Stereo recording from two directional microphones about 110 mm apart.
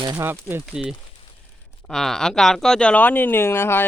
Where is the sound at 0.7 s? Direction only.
5° right (ahead or behind).